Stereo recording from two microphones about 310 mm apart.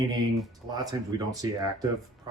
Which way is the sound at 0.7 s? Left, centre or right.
Centre.